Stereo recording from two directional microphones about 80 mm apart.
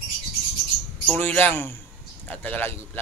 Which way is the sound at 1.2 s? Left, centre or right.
Centre.